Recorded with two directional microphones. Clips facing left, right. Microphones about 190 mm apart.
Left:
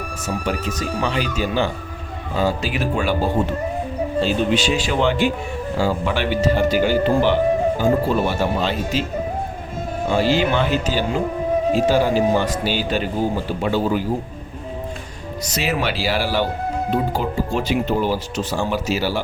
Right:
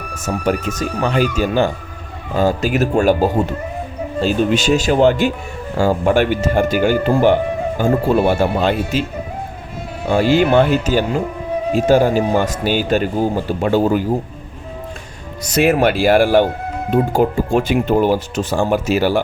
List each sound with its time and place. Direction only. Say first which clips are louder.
0.1 s speech: right 7 dB; 45° right (ahead or behind)
10.1 s speech: right 5 dB; 50° right (ahead or behind)
15.4 s speech: right 9 dB; 55° right (ahead or behind)